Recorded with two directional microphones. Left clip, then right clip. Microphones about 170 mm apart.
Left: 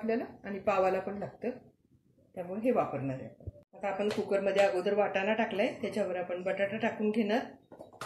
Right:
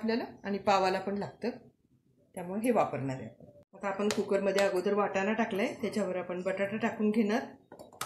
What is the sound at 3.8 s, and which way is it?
Speech, 50° right (ahead or behind).